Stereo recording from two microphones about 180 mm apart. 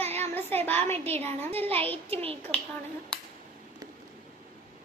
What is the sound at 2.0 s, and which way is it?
Speech, 30° right (ahead or behind).